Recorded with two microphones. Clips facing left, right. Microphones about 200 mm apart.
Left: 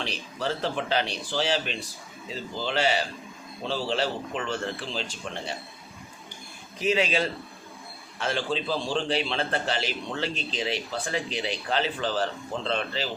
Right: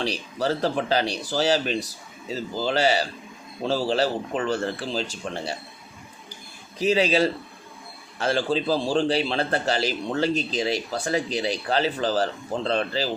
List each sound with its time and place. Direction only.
0.0 s a man's voice: 40° right (ahead or behind)
6.7 s a man's voice: 35° right (ahead or behind)